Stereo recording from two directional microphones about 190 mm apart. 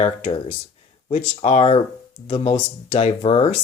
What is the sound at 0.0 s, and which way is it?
Speech, 30° left (ahead or behind).